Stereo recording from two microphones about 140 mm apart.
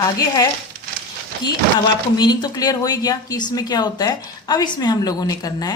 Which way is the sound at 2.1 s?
30° left (ahead or behind).